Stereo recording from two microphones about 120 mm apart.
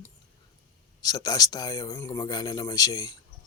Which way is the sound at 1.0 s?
30° left (ahead or behind).